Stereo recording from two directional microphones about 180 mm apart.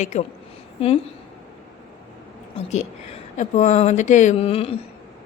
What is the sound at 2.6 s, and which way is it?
A woman's voice, 40° left (ahead or behind).